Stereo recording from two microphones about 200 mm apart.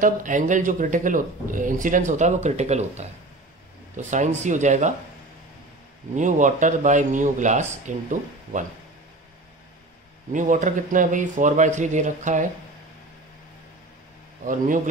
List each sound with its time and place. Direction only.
0.0 s speech: 40° right (ahead or behind)
6.1 s speech: 40° right (ahead or behind)
10.3 s speech: 40° right (ahead or behind)